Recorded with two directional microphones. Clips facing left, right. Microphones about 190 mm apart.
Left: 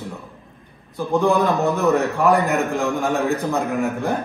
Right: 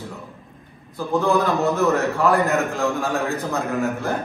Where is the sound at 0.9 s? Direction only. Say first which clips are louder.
Left 2 dB; 15° left (ahead or behind).